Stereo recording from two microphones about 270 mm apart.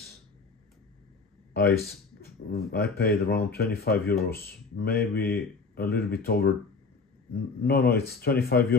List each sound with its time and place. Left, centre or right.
1.5 s speech: left